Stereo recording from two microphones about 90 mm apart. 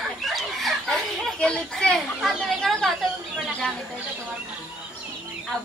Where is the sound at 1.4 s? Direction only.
10° left (ahead or behind).